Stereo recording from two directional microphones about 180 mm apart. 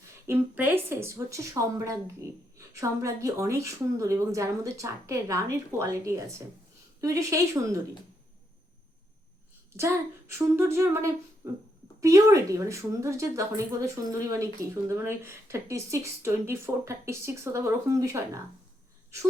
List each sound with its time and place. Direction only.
0.3 s speech: 10° right (ahead or behind)
9.7 s speech: 15° right (ahead or behind)